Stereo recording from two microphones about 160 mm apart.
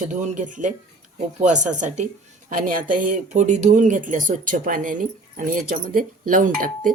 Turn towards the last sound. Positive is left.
turn(degrees=-60)  # may be behind; listen again after turning